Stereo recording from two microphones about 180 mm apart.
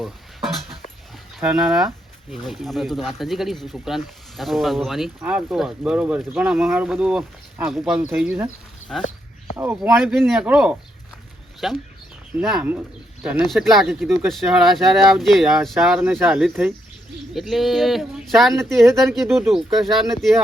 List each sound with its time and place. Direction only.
0.0 s a sound: centre (ahead or behind)
1.4 s speech: 5° right (ahead or behind)
9.6 s speech: 10° right (ahead or behind)